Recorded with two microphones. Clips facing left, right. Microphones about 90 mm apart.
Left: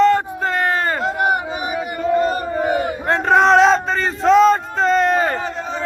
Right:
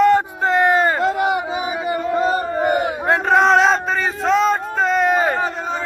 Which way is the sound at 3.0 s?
5° right (ahead or behind).